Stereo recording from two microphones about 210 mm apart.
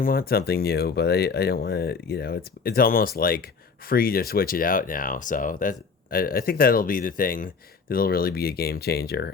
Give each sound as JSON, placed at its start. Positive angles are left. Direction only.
{"t": 0.0, "sound": "speech", "side_deg": 45}